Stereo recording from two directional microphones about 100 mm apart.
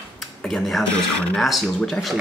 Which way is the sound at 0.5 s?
Centre (ahead or behind).